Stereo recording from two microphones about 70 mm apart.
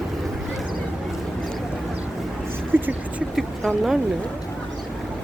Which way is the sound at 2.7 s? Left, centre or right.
Right.